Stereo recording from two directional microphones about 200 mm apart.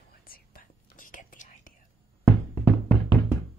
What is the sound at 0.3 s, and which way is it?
Whispering, 45° left (ahead or behind).